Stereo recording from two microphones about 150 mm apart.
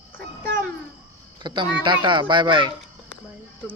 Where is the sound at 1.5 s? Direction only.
30° right (ahead or behind).